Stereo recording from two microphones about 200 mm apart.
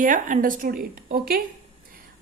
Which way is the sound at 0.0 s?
40° right (ahead or behind).